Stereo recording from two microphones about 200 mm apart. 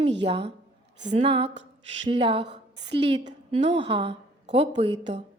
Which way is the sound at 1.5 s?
65° right (ahead or behind).